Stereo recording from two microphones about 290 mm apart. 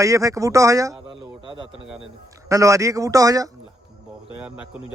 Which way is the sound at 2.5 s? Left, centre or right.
Centre.